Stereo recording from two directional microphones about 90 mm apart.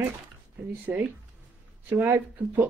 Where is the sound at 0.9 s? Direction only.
20° right (ahead or behind).